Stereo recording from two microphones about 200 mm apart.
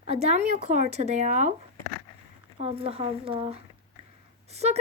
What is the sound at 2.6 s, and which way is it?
Speech, 30° right (ahead or behind).